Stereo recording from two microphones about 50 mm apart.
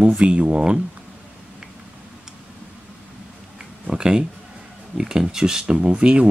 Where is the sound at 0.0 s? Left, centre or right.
Right.